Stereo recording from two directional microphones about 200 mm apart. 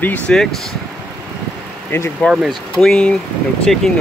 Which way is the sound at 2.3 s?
Centre (ahead or behind).